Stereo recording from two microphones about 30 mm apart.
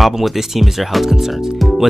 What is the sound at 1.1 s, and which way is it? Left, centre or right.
Speech, centre.